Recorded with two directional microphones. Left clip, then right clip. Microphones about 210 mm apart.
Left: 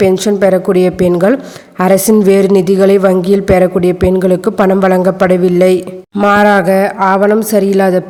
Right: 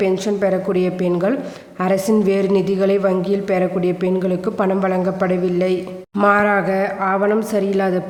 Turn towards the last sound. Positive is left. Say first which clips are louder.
# left 9 dB
turn(degrees=35)  # may be behind; listen again after turning